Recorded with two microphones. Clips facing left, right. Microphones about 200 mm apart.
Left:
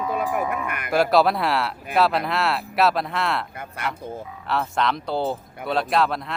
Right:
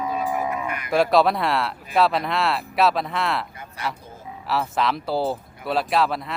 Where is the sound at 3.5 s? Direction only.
55° left (ahead or behind).